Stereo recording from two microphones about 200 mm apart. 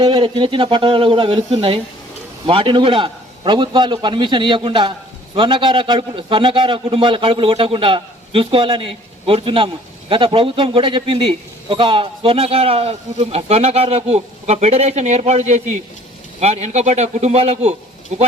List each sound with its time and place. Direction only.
0.0 s a man's voice: 25° right (ahead or behind)